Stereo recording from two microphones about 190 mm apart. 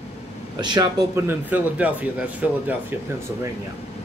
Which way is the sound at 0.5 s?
20° right (ahead or behind).